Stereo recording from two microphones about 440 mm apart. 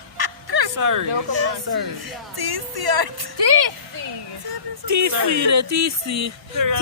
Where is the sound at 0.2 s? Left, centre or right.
Right.